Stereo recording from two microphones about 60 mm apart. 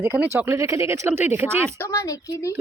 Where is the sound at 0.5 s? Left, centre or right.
Right.